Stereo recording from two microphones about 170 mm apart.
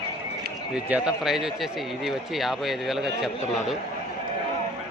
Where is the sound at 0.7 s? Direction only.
5° right (ahead or behind).